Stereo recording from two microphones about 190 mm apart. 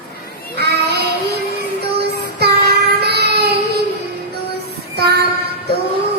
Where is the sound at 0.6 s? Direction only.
60° right (ahead or behind).